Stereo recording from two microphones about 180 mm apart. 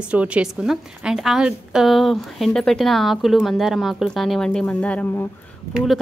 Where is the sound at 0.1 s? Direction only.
5° right (ahead or behind); by 5.3 s 10° left (ahead or behind).